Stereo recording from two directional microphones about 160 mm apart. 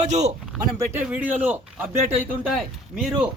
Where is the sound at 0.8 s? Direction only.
15° right (ahead or behind).